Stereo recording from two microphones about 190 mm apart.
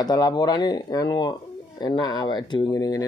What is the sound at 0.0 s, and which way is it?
Speech, 20° left (ahead or behind).